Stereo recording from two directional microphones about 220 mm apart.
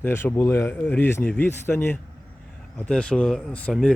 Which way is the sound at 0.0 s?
10° left (ahead or behind).